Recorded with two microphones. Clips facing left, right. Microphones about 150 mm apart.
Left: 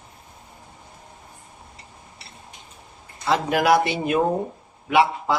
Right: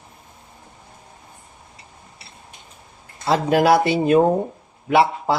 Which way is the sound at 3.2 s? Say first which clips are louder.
Right 4 dB; 30° right (ahead or behind).